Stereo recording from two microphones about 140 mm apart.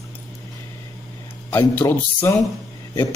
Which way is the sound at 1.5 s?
15° left (ahead or behind).